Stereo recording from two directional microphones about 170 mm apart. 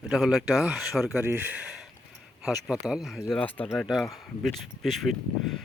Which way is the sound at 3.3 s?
10° left (ahead or behind).